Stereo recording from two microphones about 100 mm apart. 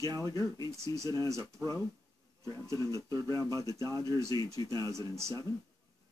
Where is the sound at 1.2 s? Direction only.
35° right (ahead or behind).